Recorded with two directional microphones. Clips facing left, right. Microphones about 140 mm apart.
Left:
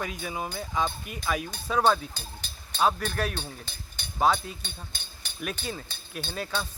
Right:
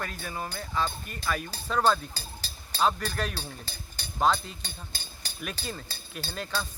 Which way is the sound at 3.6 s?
35° right (ahead or behind).